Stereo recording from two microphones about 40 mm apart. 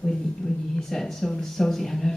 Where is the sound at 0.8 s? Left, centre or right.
Centre.